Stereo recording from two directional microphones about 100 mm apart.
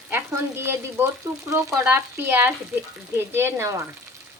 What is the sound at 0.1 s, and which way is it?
Stir, 25° right (ahead or behind).